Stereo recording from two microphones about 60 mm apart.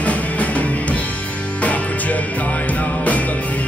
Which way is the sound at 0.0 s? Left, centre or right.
Left.